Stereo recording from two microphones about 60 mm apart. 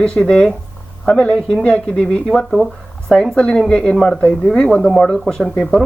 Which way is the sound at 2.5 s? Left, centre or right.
Centre.